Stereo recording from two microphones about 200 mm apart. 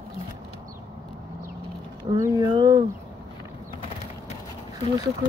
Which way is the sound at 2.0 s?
20° right (ahead or behind).